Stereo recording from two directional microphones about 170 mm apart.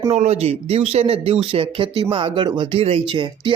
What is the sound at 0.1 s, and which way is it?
Speech, 40° right (ahead or behind).